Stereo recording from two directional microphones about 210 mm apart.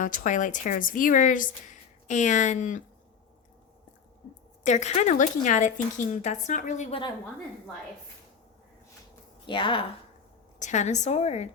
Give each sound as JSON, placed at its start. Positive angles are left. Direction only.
{"t": 0.0, "sound": "a woman's voice", "side_deg": 40}
{"t": 4.6, "sound": "a woman's voice", "side_deg": 35}
{"t": 9.5, "sound": "a woman's voice", "side_deg": 25}
{"t": 10.6, "sound": "a woman's voice", "side_deg": 35}